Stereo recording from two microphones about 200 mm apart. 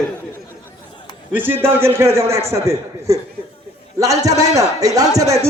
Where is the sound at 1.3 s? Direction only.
10° right (ahead or behind).